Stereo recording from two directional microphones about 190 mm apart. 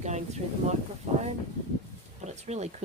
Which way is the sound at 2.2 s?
35° right (ahead or behind).